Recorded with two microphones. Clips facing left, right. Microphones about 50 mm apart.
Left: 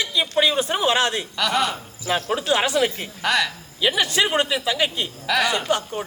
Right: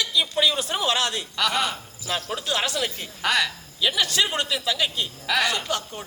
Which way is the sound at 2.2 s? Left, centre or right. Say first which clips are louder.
Left 6 dB; left.